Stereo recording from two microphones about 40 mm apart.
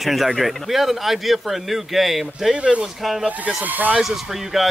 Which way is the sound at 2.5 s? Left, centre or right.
Right.